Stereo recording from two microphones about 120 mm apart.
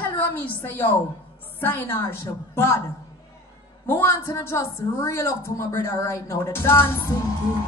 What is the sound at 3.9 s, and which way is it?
Speech, 20° left (ahead or behind).